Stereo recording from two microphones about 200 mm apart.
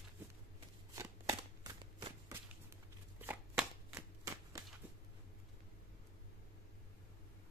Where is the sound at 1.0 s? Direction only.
15° right (ahead or behind).